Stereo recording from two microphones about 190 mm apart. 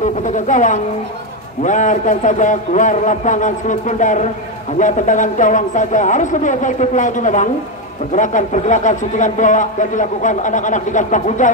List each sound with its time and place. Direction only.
0.0 s speech: 40° left (ahead or behind)